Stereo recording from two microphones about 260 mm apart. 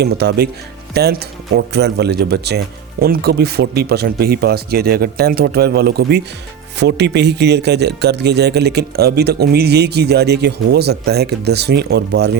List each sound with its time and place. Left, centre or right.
0.0 s speech: right